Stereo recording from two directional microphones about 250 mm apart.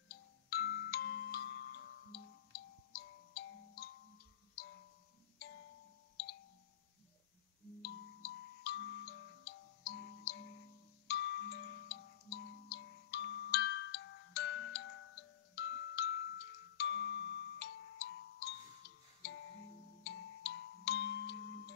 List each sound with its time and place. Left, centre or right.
0.1 s glockenspiel: left
4.6 s music: left
7.8 s music: left
20.0 s music: left